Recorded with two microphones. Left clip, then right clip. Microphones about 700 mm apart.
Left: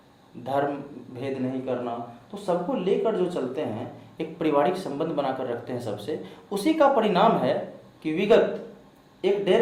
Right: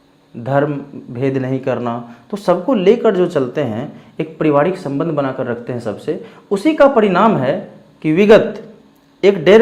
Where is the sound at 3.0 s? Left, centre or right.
Right.